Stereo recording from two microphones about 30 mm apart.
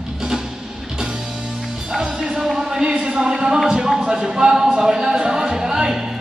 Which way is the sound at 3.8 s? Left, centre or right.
Centre.